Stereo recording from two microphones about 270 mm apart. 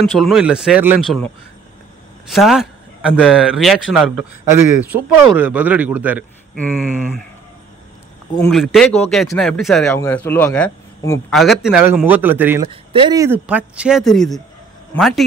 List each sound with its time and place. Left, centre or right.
0.0 s speech: centre
2.3 s speech: centre
6.5 s speech: centre
8.4 s speech: centre
12.6 s speech: centre